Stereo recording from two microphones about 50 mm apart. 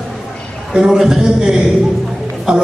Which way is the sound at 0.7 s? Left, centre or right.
Centre.